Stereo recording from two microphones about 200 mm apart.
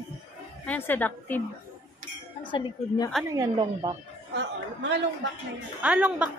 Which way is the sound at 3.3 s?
20° right (ahead or behind).